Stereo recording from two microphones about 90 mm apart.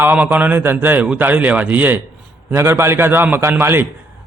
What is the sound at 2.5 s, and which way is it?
A man's voice, 30° right (ahead or behind).